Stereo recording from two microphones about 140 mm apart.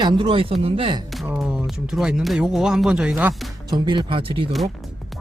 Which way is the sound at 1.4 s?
5° right (ahead or behind).